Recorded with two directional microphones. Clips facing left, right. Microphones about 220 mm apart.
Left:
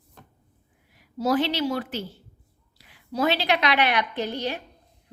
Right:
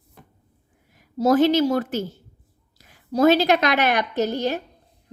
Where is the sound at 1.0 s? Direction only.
45° right (ahead or behind).